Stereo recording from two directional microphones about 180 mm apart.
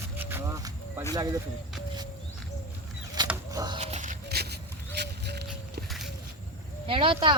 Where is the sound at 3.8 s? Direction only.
40° right (ahead or behind).